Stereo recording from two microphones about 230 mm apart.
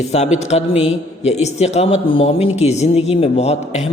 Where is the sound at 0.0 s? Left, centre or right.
Left.